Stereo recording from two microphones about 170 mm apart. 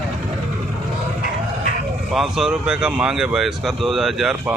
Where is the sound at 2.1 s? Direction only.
Centre (ahead or behind).